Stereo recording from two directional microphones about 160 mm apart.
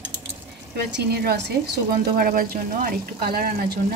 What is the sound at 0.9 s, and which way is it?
Speech, 85° right.